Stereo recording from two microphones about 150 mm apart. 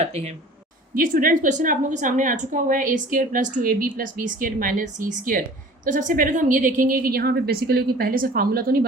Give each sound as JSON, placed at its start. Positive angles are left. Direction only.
{"t": 0.0, "sound": "speech", "side_deg": -45}
{"t": 0.9, "sound": "a woman's voice", "side_deg": -65}